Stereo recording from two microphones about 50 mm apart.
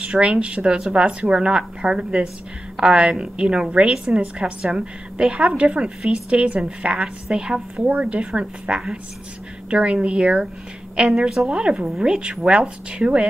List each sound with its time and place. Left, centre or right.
0.0 s a woman's voice: right
7.0 s a woman's voice: centre
7.8 s a woman's voice: right
11.1 s a woman's voice: centre
11.4 s a woman's voice: right